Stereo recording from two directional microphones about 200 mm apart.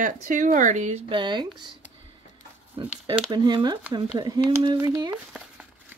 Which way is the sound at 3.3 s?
20° right (ahead or behind).